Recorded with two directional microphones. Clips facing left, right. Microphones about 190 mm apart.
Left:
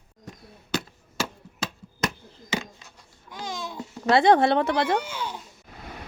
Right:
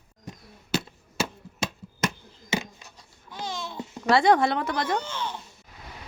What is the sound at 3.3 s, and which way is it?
Babbling, 15° left (ahead or behind).